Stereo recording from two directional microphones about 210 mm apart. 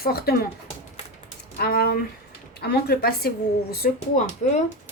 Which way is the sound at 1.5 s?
45° left (ahead or behind).